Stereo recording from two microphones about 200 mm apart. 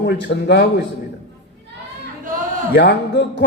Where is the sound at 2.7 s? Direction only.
60° left (ahead or behind).